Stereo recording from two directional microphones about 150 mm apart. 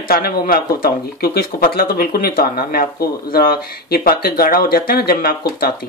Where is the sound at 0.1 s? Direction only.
85° left.